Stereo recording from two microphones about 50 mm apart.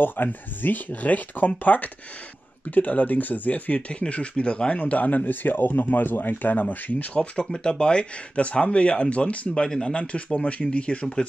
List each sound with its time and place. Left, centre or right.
0.0 s speech: left
7.2 s speech: centre